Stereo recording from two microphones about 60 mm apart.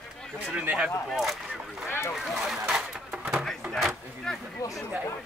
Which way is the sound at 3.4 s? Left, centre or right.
Centre.